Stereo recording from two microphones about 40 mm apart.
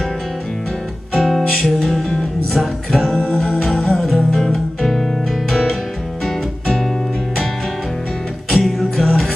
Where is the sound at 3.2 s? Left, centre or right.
Centre.